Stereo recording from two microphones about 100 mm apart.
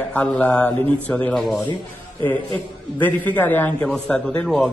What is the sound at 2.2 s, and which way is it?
Speech, 55° right (ahead or behind).